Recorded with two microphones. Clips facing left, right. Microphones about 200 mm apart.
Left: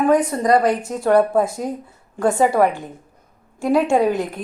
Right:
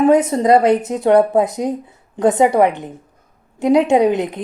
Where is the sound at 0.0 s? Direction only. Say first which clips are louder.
Right 4 dB; 25° right (ahead or behind).